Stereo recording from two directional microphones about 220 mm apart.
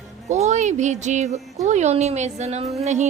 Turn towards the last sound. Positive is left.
turn(degrees=-30)  # may be behind; listen again after turning